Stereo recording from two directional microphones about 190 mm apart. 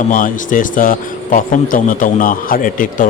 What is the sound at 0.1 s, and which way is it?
A man's voice, 45° left (ahead or behind).